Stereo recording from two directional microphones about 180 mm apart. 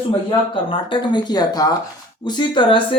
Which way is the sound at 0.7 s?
25° left (ahead or behind).